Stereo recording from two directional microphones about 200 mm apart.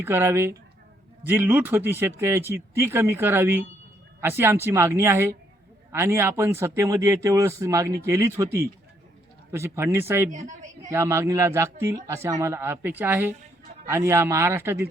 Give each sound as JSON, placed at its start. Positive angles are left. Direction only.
{"t": 0.0, "sound": "speech", "side_deg": -10}
{"t": 10.2, "sound": "a woman's voice", "side_deg": -40}
{"t": 10.8, "sound": "speech", "side_deg": -15}